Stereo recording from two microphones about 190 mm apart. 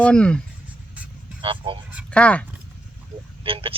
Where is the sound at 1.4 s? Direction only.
25° right (ahead or behind).